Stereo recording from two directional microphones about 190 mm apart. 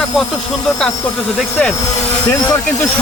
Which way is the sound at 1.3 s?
5° left (ahead or behind).